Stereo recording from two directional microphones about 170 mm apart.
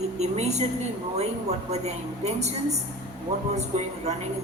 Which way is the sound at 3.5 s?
40° right (ahead or behind).